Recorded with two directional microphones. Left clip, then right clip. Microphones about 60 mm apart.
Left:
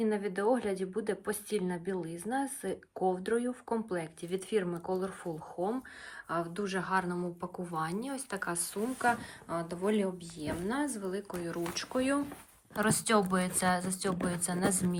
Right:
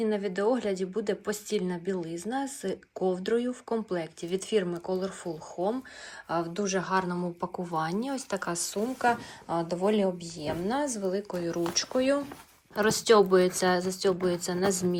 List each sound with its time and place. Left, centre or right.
0.0 s a woman's voice: centre
6.2 s a woman's voice: right
12.7 s speech: right
13.4 s a woman's voice: right